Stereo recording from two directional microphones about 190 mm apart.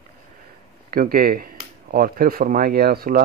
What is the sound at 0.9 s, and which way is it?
Speech, 50° right (ahead or behind).